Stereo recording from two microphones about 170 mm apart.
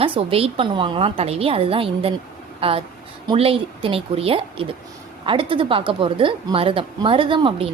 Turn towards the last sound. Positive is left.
turn(degrees=-30)  # may be behind; listen again after turning